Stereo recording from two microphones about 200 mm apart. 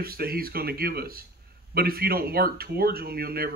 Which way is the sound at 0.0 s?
50° right (ahead or behind).